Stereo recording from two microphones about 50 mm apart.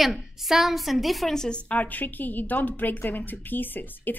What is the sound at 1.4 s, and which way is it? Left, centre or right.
A woman's voice, left.